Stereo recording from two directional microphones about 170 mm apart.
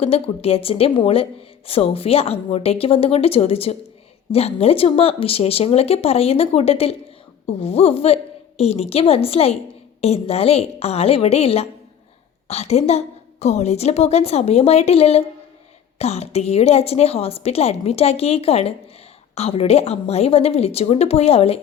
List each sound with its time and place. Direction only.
0.0 s a woman's voice: 35° left (ahead or behind)